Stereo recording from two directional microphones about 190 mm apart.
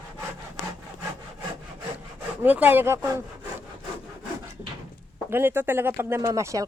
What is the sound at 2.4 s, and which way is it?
Speech, 10° right (ahead or behind).